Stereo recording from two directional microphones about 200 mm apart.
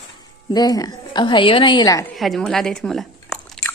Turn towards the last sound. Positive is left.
turn(degrees=0)  # may be behind; listen again after turning